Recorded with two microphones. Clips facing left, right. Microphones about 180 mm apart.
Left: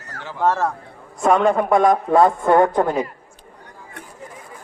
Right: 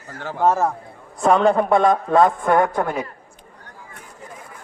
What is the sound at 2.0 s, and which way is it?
A man's voice, 15° left (ahead or behind).